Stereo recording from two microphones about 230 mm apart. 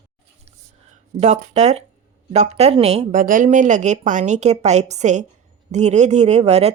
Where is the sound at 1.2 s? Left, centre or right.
Right.